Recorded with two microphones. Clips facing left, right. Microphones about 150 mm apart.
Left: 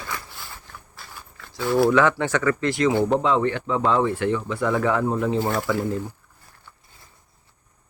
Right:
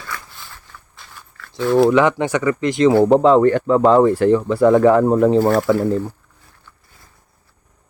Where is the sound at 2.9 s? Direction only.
40° right (ahead or behind).